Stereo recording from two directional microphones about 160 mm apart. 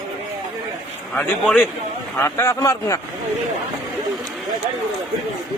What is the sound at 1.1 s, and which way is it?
A man's voice, 10° left (ahead or behind).